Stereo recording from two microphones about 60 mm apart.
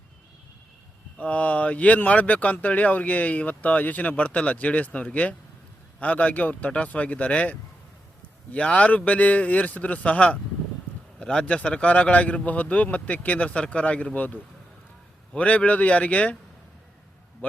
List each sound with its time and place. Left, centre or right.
1.2 s speech: left
15.4 s speech: left